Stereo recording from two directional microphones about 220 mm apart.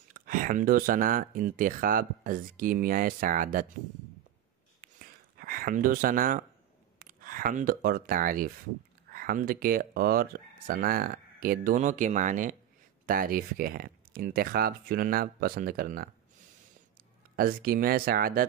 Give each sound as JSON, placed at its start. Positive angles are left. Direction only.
{"t": 0.1, "sound": "speech", "side_deg": -40}
{"t": 4.8, "sound": "a sound", "side_deg": -40}
{"t": 7.0, "sound": "speech", "side_deg": -40}
{"t": 17.4, "sound": "speech", "side_deg": -40}